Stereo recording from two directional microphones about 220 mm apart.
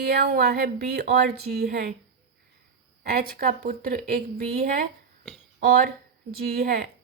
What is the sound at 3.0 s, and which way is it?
A woman's voice, 40° right (ahead or behind).